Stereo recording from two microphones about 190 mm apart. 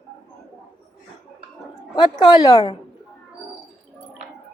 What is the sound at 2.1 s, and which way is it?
Speech, 20° left (ahead or behind).